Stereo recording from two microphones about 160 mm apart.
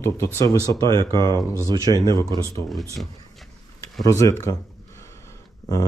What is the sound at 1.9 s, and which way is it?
Speech, 25° right (ahead or behind).